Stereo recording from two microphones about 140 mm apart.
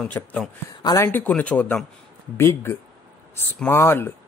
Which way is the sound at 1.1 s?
10° left (ahead or behind).